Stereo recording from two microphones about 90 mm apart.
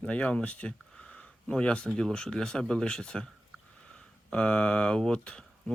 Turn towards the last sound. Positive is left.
turn(degrees=10)  # may be behind; listen again after turning